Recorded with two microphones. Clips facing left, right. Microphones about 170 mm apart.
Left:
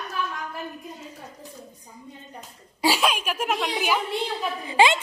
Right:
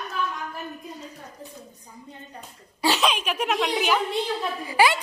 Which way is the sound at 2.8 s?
10° left (ahead or behind).